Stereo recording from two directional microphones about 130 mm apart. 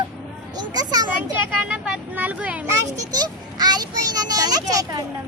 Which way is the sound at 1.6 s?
10° right (ahead or behind).